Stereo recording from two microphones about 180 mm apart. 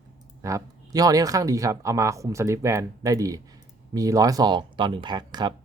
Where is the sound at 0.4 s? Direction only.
20° right (ahead or behind).